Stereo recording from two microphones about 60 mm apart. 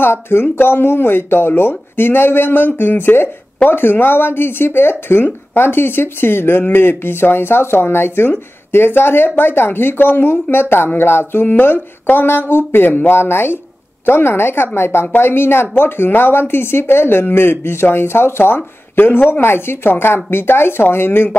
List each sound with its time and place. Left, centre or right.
0.0 s speech: left